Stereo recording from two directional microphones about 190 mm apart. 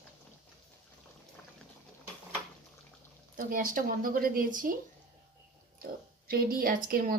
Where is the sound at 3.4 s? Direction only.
45° right (ahead or behind).